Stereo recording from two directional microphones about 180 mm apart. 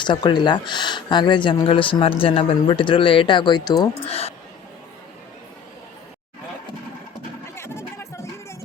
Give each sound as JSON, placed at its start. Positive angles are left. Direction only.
{"t": 0.0, "sound": "speech", "side_deg": 25}
{"t": 4.1, "sound": "speech", "side_deg": 35}
{"t": 7.5, "sound": "music", "side_deg": 15}